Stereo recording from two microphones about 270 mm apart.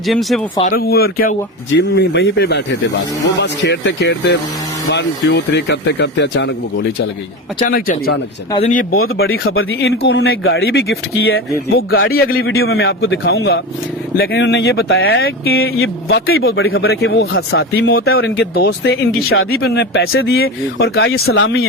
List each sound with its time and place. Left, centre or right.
0.1 s speech: centre
0.7 s speech: left
7.7 s speech: left
9.2 s a man's voice: left
11.9 s speech: left
12.4 s a man's voice: left